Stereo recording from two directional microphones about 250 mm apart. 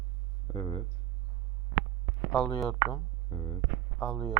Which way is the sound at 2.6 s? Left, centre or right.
Centre.